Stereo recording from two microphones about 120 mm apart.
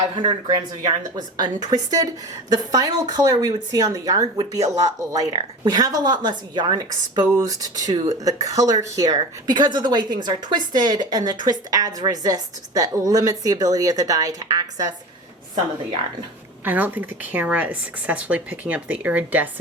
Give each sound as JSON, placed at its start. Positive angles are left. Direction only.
{"t": 0.2, "sound": "speech", "side_deg": -40}
{"t": 16.6, "sound": "speech", "side_deg": -15}